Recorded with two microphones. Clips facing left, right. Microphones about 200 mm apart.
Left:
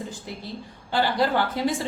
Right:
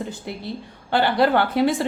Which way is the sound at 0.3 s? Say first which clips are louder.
Right 4 dB; 65° right (ahead or behind).